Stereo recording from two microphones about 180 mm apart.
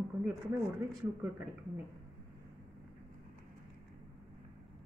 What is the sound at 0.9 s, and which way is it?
Speech, 10° right (ahead or behind).